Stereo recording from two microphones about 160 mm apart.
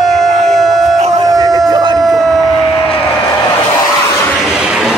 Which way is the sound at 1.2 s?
20° right (ahead or behind).